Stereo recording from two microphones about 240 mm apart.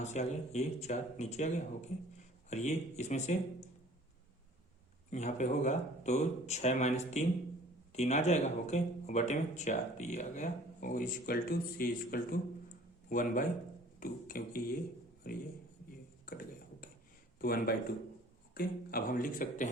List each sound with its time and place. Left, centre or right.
0.0 s speech: left
5.1 s a man's voice: left